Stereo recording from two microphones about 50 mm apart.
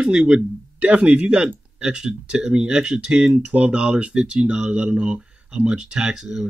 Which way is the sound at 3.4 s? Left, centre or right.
Right.